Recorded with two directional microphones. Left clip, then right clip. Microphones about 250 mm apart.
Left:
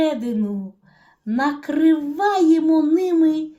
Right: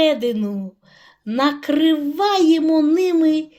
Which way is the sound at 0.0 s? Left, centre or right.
Right.